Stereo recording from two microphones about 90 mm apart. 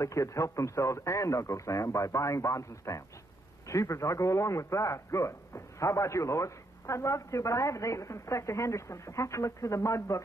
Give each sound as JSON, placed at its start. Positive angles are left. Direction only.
{"t": 0.0, "sound": "a man's voice", "side_deg": 35}